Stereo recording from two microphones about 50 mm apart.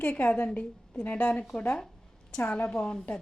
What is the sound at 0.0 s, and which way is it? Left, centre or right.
A woman's voice, left.